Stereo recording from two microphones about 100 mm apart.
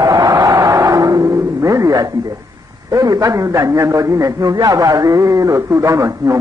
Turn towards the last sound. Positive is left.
turn(degrees=-35)  # may be behind; listen again after turning